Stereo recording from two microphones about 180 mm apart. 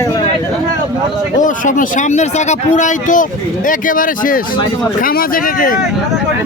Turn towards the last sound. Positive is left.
turn(degrees=50)  # may be behind; listen again after turning